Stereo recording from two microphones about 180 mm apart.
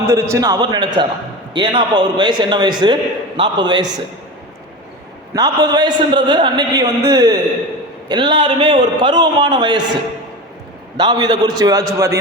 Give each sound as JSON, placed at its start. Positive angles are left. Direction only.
{"t": 0.1, "sound": "a man's voice", "side_deg": -20}
{"t": 5.3, "sound": "a man's voice", "side_deg": -20}
{"t": 10.9, "sound": "a man's voice", "side_deg": -25}